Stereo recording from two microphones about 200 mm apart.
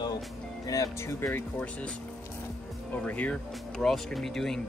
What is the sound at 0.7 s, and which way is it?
Speech, 15° left (ahead or behind).